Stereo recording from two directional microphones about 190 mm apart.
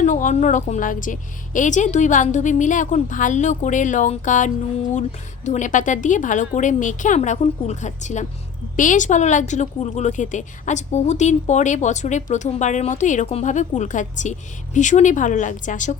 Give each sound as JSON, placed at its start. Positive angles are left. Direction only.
{"t": 0.0, "sound": "a woman's voice", "side_deg": 40}